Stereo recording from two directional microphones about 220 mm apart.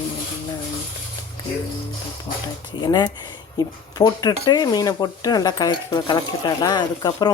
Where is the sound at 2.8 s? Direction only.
20° left (ahead or behind).